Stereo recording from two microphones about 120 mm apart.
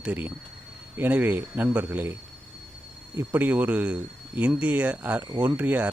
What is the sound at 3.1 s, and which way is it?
Speech, 15° right (ahead or behind).